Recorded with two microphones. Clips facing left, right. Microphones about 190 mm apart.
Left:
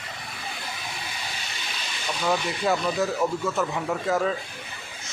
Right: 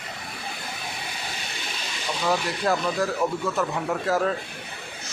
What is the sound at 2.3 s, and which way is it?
Speech, centre (ahead or behind).